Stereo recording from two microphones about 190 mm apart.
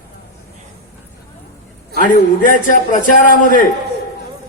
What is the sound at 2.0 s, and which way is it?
Speech, 45° left (ahead or behind).